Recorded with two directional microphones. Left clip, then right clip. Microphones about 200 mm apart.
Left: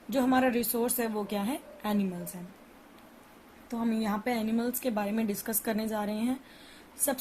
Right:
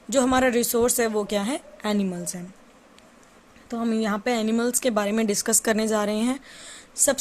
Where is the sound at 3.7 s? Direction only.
35° right (ahead or behind).